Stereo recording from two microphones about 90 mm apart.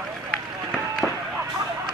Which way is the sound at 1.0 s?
5° left (ahead or behind).